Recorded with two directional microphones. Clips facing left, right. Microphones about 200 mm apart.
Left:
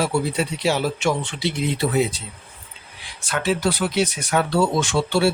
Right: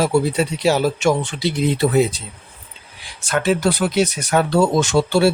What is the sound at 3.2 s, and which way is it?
Speech, 45° right (ahead or behind).